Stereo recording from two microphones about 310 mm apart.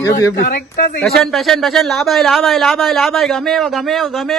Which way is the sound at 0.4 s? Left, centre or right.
Left.